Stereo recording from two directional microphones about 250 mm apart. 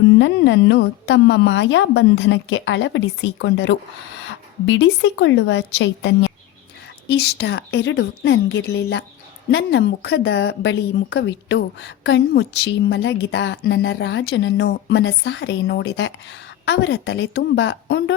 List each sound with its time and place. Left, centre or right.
0.2 s a woman's voice: left